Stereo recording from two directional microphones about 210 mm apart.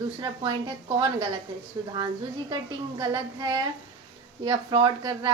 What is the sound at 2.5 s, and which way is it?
A woman's voice, 20° right (ahead or behind).